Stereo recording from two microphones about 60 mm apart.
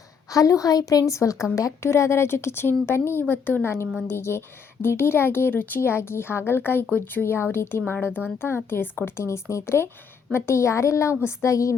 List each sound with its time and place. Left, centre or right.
0.3 s a woman's voice: left
4.1 s a woman's voice: left
5.5 s speech: left
8.4 s speech: left
9.2 s a woman's voice: left